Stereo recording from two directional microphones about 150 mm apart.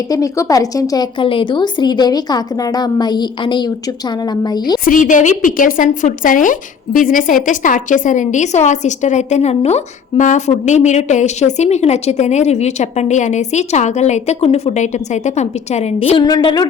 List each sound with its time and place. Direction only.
0.1 s a woman's voice: 20° left (ahead or behind)
4.9 s a woman's voice: 60° left (ahead or behind); by 16.6 s 30° left (ahead or behind)